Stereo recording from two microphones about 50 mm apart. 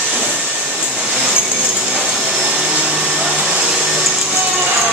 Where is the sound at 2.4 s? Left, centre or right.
Right.